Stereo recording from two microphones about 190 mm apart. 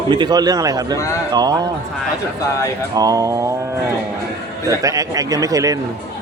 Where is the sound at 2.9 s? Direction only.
20° right (ahead or behind).